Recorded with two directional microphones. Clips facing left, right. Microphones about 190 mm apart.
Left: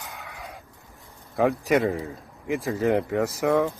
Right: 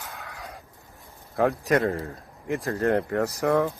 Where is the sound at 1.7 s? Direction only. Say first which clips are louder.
Left 1 dB; 5° left (ahead or behind).